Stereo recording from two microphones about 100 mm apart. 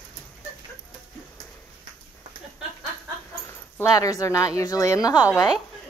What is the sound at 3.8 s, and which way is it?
A woman's voice, 35° left (ahead or behind).